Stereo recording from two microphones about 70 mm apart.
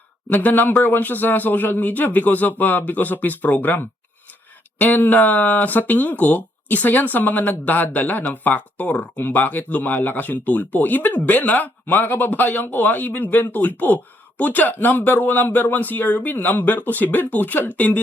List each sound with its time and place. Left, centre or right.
0.3 s speech: left